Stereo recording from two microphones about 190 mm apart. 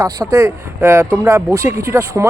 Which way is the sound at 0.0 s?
20° right (ahead or behind).